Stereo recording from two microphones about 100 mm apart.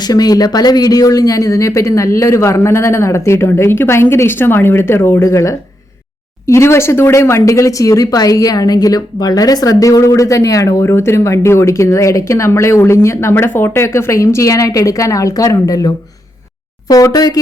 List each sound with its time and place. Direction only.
0.0 s speech: 40° left (ahead or behind)